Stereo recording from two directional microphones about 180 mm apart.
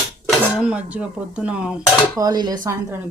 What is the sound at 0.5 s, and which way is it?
Speech, 5° right (ahead or behind).